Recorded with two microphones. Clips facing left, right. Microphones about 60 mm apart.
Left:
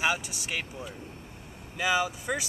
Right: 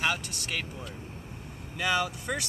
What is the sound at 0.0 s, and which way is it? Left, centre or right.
Speech, centre.